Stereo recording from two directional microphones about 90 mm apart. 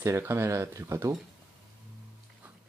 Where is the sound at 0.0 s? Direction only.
30° right (ahead or behind).